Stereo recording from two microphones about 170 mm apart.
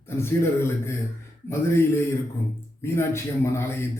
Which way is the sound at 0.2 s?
15° left (ahead or behind).